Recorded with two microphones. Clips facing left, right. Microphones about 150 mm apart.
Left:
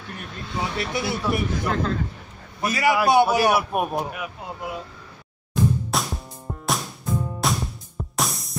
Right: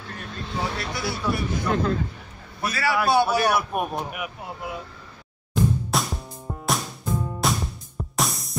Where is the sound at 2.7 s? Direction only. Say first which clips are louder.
Left 3 dB; 15° left (ahead or behind).